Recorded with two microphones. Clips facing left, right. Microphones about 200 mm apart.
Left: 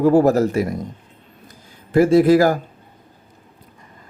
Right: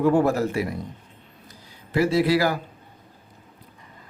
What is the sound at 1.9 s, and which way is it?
Speech, 50° left (ahead or behind).